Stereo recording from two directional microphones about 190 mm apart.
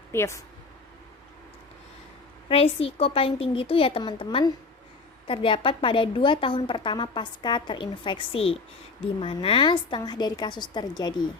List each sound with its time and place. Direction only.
0.1 s a woman's voice: 15° left (ahead or behind)
2.5 s a woman's voice: 30° left (ahead or behind)